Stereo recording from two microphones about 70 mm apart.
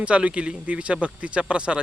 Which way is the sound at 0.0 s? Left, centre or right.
Centre.